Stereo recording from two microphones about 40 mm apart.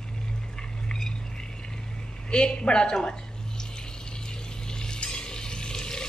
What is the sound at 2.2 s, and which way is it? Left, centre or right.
Speech, left.